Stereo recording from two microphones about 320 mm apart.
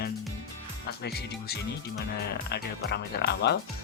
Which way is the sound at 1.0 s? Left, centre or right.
Left.